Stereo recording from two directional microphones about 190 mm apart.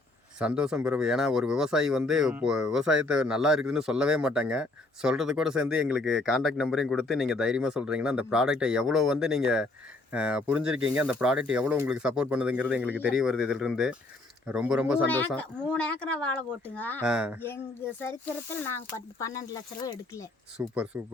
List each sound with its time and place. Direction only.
0.3 s speech: 5° right (ahead or behind)
15.0 s speech: 10° left (ahead or behind)
17.1 s speech: 5° right (ahead or behind)
18.0 s speech: 10° left (ahead or behind)
20.6 s speech: 5° right (ahead or behind)